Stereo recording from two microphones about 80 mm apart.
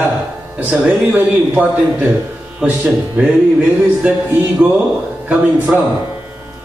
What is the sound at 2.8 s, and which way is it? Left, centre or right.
A man's voice, centre.